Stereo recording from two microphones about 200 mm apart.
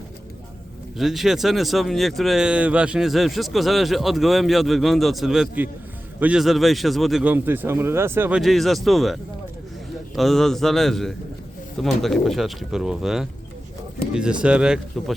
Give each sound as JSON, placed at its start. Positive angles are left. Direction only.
{"t": 0.9, "sound": "speech", "side_deg": 0}
{"t": 10.2, "sound": "speech", "side_deg": 0}